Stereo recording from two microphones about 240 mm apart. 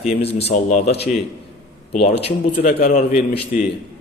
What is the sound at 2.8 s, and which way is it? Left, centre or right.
Speech, left.